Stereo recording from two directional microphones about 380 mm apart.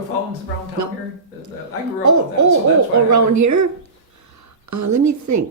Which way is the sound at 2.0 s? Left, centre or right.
Right.